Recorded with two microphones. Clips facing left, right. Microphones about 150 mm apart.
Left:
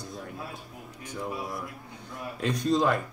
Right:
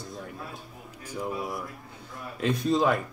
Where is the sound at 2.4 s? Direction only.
Centre (ahead or behind).